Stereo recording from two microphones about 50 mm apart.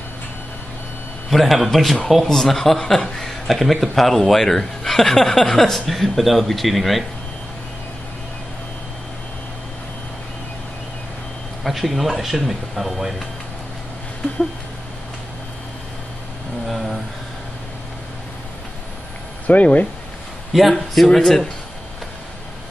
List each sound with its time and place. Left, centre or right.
1.3 s speech: centre
11.6 s speech: centre
16.6 s a sound: centre
19.4 s speech: left
20.5 s speech: centre